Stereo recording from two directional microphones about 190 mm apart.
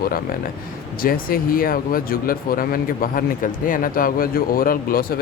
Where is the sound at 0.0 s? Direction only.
50° left (ahead or behind).